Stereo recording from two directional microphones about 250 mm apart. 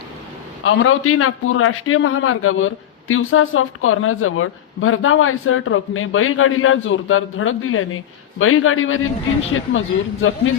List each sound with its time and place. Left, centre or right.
0.6 s a man's voice: left